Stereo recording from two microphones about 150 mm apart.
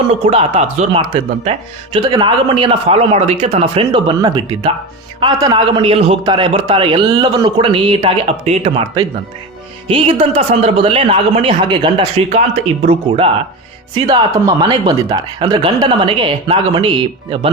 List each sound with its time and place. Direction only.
0.1 s speech: 40° right (ahead or behind)
13.9 s speech: 25° right (ahead or behind)